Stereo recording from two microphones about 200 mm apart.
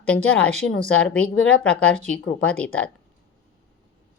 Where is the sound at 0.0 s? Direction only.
5° left (ahead or behind).